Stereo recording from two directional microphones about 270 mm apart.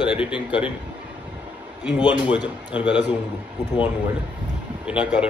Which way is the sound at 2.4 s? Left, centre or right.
Centre.